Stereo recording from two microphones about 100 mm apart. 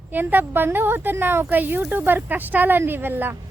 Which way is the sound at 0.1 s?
20° right (ahead or behind).